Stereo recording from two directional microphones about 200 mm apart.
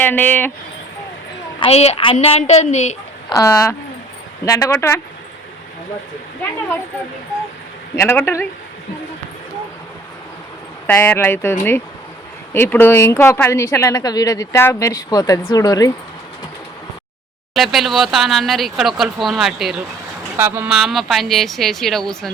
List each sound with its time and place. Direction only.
0.0 s speech: 10° left (ahead or behind)
1.5 s a woman's voice: 30° left (ahead or behind)
3.2 s speech: 15° left (ahead or behind)
7.9 s speech: 10° left (ahead or behind)
10.8 s speech: 10° left (ahead or behind)
12.5 s speech: 10° left (ahead or behind)
17.5 s speech: centre (ahead or behind)